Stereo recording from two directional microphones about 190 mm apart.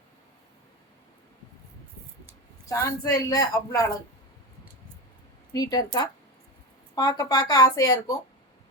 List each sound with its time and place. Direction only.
2.6 s speech: 15° left (ahead or behind)
5.5 s speech: 20° left (ahead or behind)